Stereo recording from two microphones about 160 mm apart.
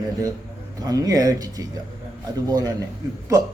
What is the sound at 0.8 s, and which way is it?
A man's voice, 20° right (ahead or behind).